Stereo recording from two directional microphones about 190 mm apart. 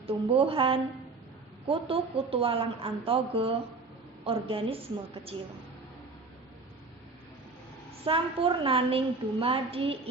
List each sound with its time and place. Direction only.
0.0 s a woman's voice: 30° right (ahead or behind)
8.0 s a woman's voice: 30° right (ahead or behind)